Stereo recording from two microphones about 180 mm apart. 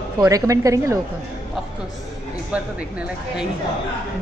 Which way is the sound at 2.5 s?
5° right (ahead or behind).